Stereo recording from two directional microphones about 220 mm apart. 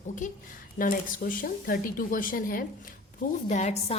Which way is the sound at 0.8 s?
40° left (ahead or behind).